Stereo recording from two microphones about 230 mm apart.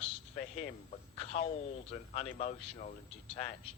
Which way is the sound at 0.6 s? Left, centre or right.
Left.